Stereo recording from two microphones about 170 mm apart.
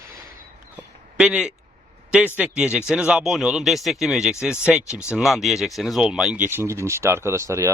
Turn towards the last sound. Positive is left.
turn(degrees=-15)  # may be behind; listen again after turning